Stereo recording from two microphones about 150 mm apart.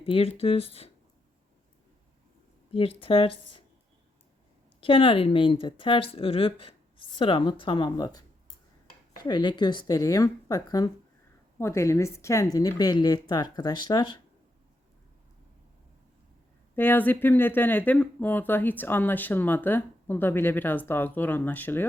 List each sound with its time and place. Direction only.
0.0 s speech: 40° left (ahead or behind)
3.0 s speech: 40° left (ahead or behind)
4.8 s speech: 35° left (ahead or behind)
9.2 s speech: 30° left (ahead or behind)
16.7 s speech: 15° left (ahead or behind)